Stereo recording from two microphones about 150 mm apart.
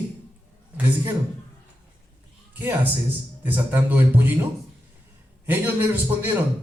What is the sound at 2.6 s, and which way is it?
A man's voice, 15° right (ahead or behind).